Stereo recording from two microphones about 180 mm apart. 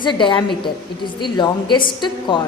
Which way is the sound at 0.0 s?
25° left (ahead or behind).